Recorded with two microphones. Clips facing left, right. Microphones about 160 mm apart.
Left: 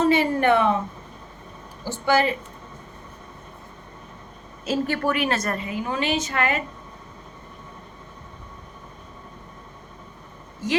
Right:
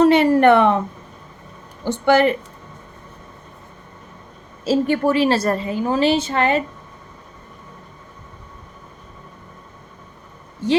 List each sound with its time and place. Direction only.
0.0 s a sound: 65° right (ahead or behind)
1.8 s speech: 65° right (ahead or behind)
4.9 s a woman's voice: 30° right (ahead or behind)
10.6 s a woman's voice: 30° right (ahead or behind)